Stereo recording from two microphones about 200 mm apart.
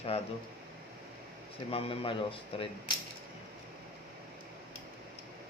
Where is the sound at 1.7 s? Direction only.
25° left (ahead or behind).